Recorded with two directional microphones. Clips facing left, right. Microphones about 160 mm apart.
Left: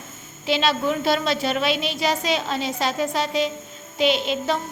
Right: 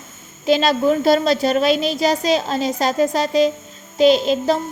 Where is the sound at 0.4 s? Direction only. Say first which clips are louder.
Right 6 dB; 40° right (ahead or behind).